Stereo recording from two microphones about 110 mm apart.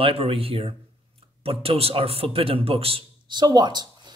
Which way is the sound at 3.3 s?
40° right (ahead or behind).